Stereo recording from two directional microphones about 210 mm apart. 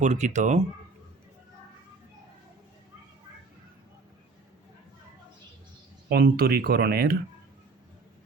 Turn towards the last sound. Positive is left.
turn(degrees=-45)  # may be behind; listen again after turning